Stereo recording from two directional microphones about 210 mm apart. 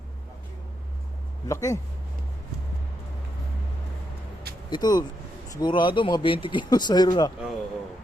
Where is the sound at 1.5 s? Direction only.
15° left (ahead or behind).